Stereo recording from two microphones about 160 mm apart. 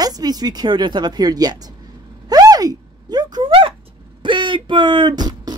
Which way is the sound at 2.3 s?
25° right (ahead or behind).